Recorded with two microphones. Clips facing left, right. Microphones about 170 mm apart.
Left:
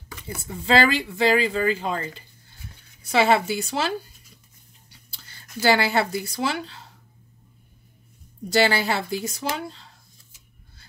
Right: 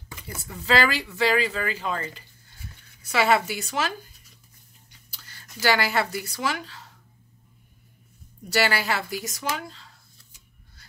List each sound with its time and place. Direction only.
0.4 s speech: 25° left (ahead or behind)
5.6 s a woman's voice: 25° left (ahead or behind)
8.6 s a woman's voice: 30° left (ahead or behind)